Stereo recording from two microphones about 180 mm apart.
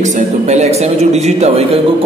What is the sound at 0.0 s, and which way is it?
A man's voice, 40° right (ahead or behind).